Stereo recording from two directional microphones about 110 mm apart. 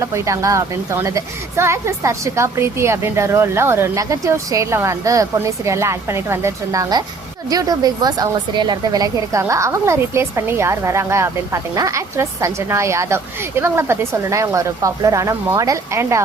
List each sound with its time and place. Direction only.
0.0 s a woman's voice: 30° right (ahead or behind)